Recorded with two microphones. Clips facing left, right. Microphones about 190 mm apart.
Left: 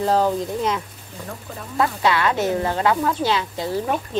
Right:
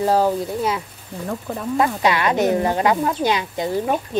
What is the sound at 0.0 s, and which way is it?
Speech, 10° right (ahead or behind).